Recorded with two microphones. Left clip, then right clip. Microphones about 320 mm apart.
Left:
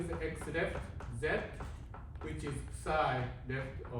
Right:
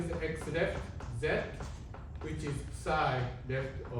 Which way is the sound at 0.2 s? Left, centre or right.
Centre.